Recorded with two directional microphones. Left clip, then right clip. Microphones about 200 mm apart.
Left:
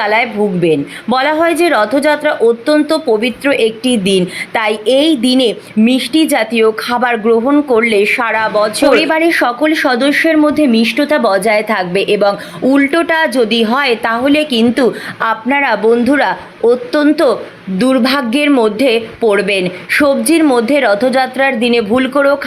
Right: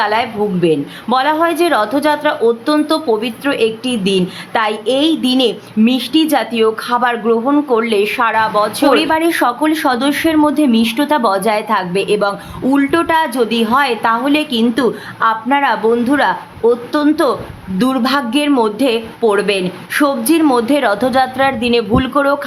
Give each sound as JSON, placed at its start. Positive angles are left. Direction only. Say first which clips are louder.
{"t": 0.0, "sound": "a woman's voice", "louder": "left 2 dB", "side_deg": 10}